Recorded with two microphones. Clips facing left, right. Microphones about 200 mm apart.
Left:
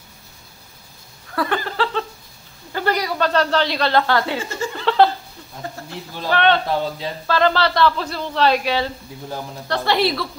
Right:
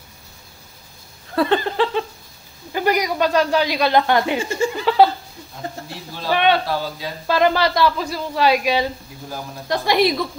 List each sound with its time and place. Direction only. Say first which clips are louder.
1.3 s a sound: right 5 dB; 25° right (ahead or behind)
2.7 s speech: right 2 dB; 15° right (ahead or behind)
6.3 s speech: even; 10° right (ahead or behind)
6.7 s speech: left 2 dB; 25° left (ahead or behind)
7.2 s speech: right 1 dB; 15° right (ahead or behind)